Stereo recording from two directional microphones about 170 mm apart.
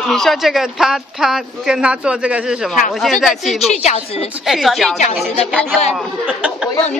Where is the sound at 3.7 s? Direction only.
40° left (ahead or behind).